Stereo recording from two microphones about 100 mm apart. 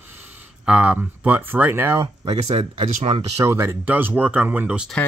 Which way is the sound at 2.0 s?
50° right (ahead or behind).